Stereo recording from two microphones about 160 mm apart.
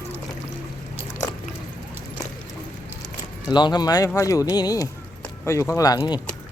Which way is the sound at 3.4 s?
30° left (ahead or behind).